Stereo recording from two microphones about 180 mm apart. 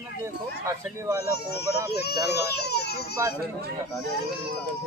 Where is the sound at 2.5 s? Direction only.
65° left (ahead or behind).